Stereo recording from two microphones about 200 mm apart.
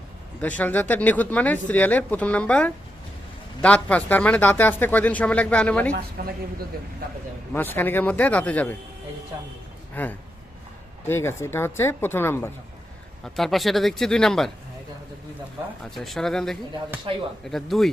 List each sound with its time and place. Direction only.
0.4 s speech: 5° left (ahead or behind)
6.2 s speech: 50° right (ahead or behind)
7.5 s speech: 10° left (ahead or behind)
9.9 s speech: 10° left (ahead or behind)
15.8 s speech: centre (ahead or behind)